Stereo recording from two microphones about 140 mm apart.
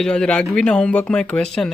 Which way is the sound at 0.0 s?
5° left (ahead or behind).